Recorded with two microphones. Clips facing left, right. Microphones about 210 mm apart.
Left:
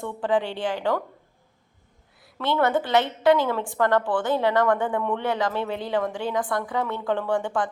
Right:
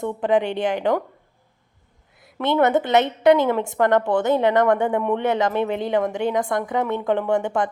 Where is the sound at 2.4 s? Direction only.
20° right (ahead or behind).